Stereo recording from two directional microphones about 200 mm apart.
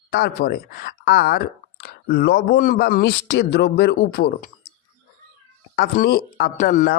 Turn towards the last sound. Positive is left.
turn(degrees=40)  # may be behind; listen again after turning